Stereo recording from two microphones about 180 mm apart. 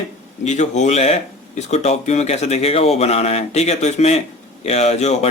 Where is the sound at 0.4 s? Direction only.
40° left (ahead or behind).